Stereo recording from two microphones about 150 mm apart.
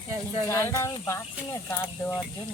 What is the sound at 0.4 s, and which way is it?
Speech, 20° left (ahead or behind).